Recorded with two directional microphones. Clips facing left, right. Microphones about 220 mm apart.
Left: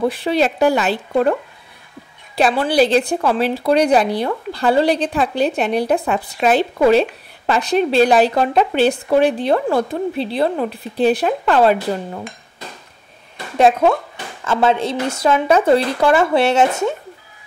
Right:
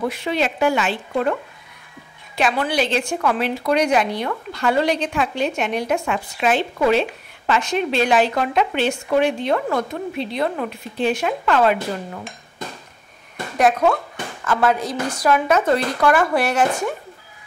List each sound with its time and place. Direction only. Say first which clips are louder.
0.1 s speech: left 5 dB; 35° left (ahead or behind)
2.3 s speech: left 5 dB; 35° left (ahead or behind)
13.6 s speech: left 4 dB; 25° left (ahead or behind)